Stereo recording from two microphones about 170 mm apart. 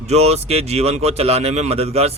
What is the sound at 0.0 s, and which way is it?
Speech, 40° right (ahead or behind).